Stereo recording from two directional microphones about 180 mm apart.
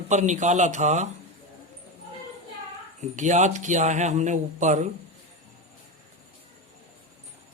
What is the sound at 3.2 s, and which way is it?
Speech, 40° right (ahead or behind).